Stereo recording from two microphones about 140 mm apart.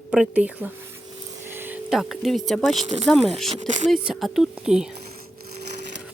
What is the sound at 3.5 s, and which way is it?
Speech, 60° right (ahead or behind).